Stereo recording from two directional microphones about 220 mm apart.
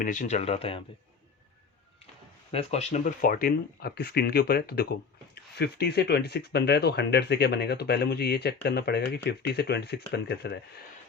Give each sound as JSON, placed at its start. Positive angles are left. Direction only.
{"t": 0.0, "sound": "speech", "side_deg": 35}
{"t": 2.5, "sound": "speech", "side_deg": 30}